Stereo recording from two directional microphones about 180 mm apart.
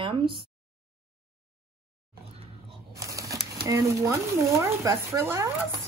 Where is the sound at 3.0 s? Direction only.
15° right (ahead or behind).